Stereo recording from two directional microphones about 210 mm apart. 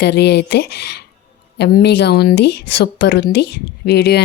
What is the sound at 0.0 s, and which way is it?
Speech, 50° left (ahead or behind).